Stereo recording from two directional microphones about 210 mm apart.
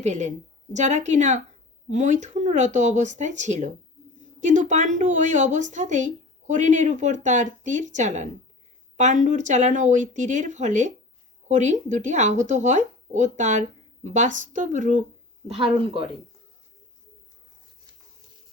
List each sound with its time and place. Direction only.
0.0 s a woman's voice: 35° right (ahead or behind)
15.4 s speech: 25° right (ahead or behind)